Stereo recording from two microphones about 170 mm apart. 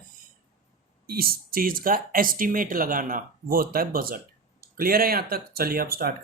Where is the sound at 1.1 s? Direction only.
60° right (ahead or behind).